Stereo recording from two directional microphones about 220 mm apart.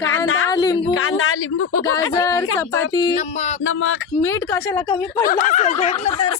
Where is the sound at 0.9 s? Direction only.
70° left (ahead or behind).